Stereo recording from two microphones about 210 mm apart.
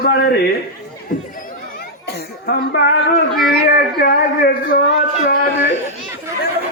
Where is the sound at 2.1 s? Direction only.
50° left (ahead or behind).